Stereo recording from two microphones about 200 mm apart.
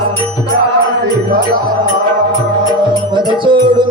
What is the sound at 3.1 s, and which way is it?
Music, 25° right (ahead or behind).